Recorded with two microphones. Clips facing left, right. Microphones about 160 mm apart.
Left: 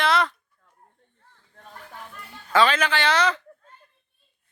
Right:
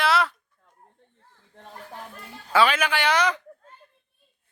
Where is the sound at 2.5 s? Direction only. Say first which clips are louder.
Left 1 dB; 10° right (ahead or behind).